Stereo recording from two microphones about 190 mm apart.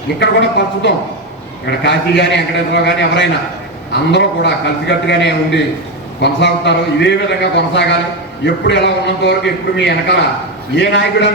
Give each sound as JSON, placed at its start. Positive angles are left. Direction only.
{"t": 0.2, "sound": "a man's voice", "side_deg": 65}